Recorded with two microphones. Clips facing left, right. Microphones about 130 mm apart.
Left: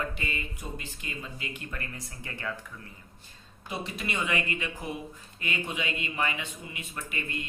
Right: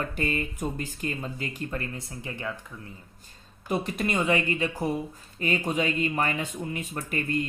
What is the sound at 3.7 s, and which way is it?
A woman's voice, 50° right (ahead or behind).